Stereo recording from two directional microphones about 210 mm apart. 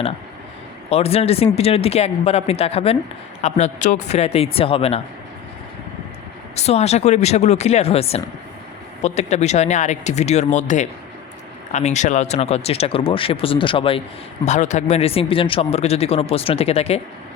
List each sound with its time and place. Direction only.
0.9 s speech: 30° left (ahead or behind)
6.6 s speech: 30° left (ahead or behind)